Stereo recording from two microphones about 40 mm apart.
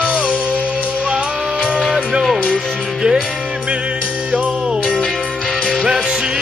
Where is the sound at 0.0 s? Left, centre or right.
Right.